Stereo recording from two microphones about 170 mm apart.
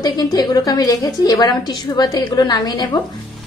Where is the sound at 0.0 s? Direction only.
25° left (ahead or behind).